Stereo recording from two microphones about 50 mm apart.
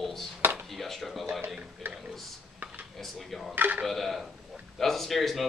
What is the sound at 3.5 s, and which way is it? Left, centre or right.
Speech, right.